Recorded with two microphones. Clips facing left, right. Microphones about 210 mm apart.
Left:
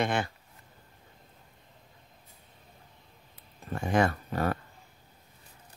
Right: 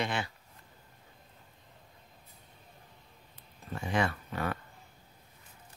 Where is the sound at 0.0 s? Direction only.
50° left (ahead or behind).